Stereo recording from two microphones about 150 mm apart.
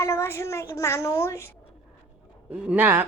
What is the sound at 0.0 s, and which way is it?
A woman's voice, 15° left (ahead or behind).